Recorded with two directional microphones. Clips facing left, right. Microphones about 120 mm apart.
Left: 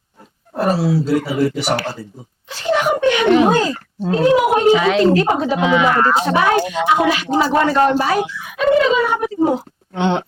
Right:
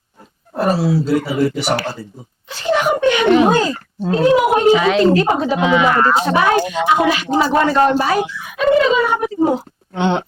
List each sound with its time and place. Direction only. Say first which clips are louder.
0.5 s a woman's voice: right 1 dB; 25° right (ahead or behind)
2.5 s a sound: right 1 dB; 20° right (ahead or behind)
4.0 s a woman's voice: right 1 dB; 20° right (ahead or behind)